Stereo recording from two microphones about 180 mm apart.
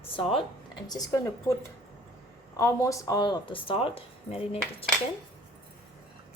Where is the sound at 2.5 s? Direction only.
15° left (ahead or behind); by 4.8 s 35° left (ahead or behind).